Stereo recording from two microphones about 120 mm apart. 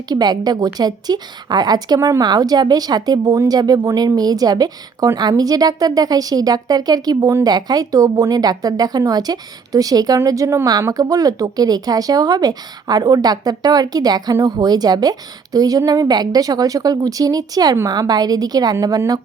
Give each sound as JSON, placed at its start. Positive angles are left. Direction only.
{"t": 0.1, "sound": "a woman's voice", "side_deg": -35}